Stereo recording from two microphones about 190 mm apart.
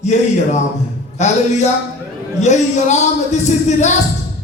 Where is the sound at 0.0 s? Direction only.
40° left (ahead or behind).